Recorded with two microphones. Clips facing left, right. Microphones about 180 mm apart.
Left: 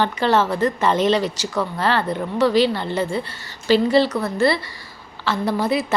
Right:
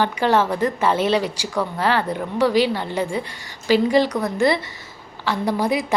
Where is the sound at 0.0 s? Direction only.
10° right (ahead or behind).